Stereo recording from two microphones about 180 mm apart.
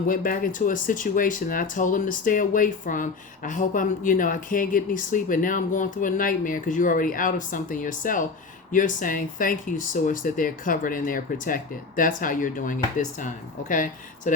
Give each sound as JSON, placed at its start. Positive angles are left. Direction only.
{"t": 0.1, "sound": "speech", "side_deg": 50}